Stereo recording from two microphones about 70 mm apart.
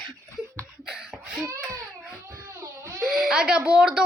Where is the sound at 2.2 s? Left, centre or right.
Right.